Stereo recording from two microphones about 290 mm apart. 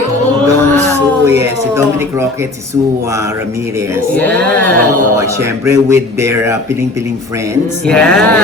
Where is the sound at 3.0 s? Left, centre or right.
Centre.